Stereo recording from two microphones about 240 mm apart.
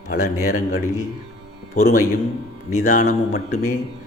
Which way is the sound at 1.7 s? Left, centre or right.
Left.